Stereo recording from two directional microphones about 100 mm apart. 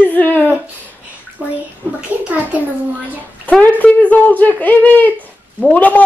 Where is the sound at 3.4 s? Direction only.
15° left (ahead or behind).